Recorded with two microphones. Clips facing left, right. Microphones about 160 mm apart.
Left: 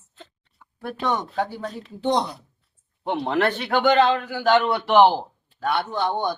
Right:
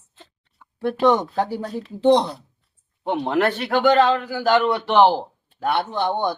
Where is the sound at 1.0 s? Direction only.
30° right (ahead or behind).